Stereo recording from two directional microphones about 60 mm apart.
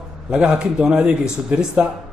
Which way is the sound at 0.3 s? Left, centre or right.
Centre.